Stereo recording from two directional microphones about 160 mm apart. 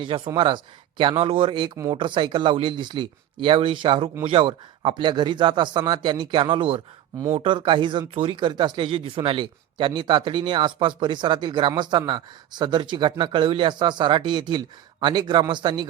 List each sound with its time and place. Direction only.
0.3 s a man's voice: 30° right (ahead or behind)
1.7 s speech: 20° right (ahead or behind)
2.0 s a man's voice: 30° right (ahead or behind)